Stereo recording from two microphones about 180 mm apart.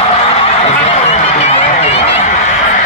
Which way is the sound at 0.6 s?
35° left (ahead or behind).